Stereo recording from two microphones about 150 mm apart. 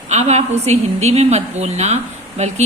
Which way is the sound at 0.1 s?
45° right (ahead or behind).